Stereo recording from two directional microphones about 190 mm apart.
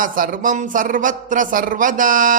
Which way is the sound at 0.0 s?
45° right (ahead or behind).